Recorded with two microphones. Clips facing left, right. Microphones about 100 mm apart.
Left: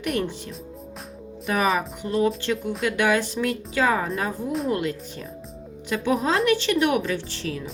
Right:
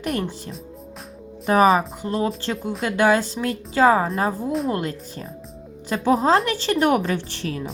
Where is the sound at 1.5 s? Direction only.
35° right (ahead or behind).